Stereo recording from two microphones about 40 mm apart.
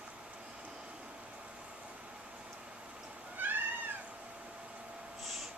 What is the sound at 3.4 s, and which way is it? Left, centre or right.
Cat, right.